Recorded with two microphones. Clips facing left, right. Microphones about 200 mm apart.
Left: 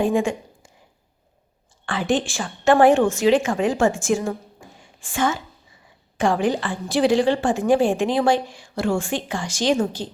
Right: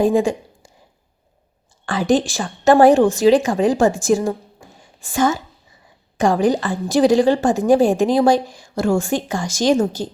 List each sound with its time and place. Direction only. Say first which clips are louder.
0.0 s a woman's voice: right 4 dB; 35° right (ahead or behind)
1.9 s a woman's voice: right 5 dB; 40° right (ahead or behind)